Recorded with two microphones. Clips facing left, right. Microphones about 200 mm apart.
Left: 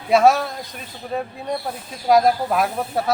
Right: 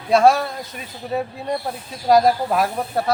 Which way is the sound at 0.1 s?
Centre (ahead or behind).